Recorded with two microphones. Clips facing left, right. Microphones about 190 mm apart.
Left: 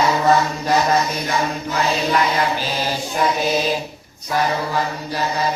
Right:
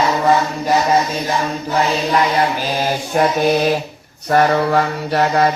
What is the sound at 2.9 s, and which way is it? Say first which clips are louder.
Mantra: right 4 dB; 55° right (ahead or behind).